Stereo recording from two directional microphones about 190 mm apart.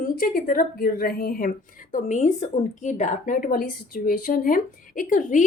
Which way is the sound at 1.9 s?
40° left (ahead or behind).